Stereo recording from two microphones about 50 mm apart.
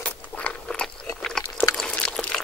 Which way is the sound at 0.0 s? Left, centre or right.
Left.